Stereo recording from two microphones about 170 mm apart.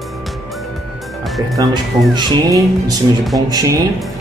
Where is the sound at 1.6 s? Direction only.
25° right (ahead or behind).